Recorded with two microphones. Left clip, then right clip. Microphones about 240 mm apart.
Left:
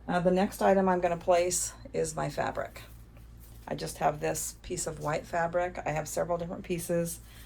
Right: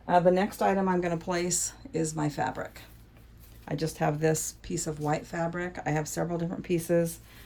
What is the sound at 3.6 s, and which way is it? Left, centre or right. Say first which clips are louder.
Speech: even; right.